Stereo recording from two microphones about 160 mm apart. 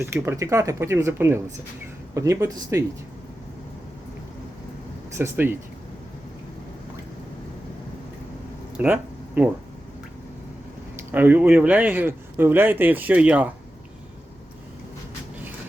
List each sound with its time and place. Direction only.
0.0 s speech: 15° right (ahead or behind)
5.1 s speech: 15° right (ahead or behind)
8.8 s speech: 10° right (ahead or behind)
11.1 s speech: 10° right (ahead or behind)